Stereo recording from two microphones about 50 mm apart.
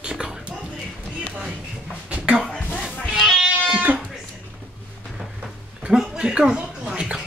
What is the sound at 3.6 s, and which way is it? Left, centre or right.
Sheep, right.